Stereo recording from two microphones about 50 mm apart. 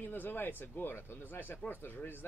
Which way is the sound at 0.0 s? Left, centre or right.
Left.